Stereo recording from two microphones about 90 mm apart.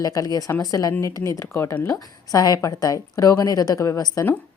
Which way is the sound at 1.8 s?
40° left (ahead or behind).